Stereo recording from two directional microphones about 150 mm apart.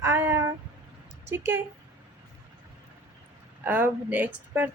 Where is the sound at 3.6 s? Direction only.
10° right (ahead or behind).